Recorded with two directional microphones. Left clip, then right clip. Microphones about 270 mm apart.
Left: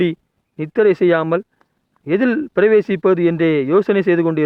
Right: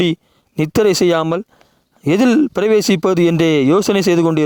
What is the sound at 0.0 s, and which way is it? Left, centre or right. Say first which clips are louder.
Speech: right 2 dB; right.